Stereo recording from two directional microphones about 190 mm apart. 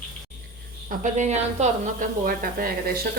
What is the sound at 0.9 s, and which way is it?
Speech, 40° right (ahead or behind).